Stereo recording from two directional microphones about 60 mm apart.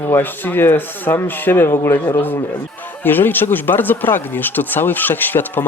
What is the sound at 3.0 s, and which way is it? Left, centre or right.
Speech, left.